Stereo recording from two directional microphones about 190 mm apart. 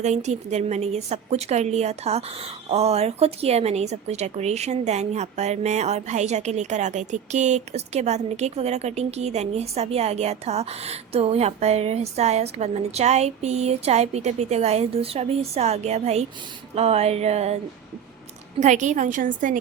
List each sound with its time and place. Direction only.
0.0 s a woman's voice: 35° right (ahead or behind)
18.6 s a woman's voice: 40° right (ahead or behind)